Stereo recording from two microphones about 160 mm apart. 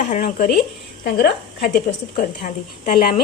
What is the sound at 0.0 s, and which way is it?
Speech, 50° left (ahead or behind).